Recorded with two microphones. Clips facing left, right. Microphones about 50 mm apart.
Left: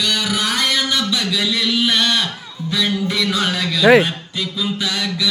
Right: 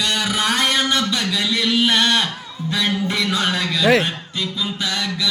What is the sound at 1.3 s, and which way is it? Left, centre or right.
A man's voice, centre.